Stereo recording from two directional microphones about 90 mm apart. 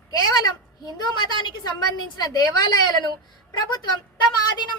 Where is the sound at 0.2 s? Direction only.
50° left (ahead or behind).